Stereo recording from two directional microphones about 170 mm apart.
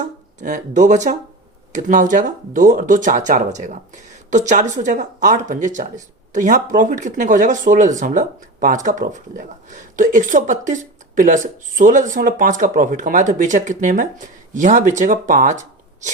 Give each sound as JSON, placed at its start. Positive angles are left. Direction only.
{"t": 0.0, "sound": "speech", "side_deg": -45}